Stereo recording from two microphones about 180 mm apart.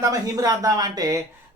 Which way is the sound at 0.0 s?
20° right (ahead or behind).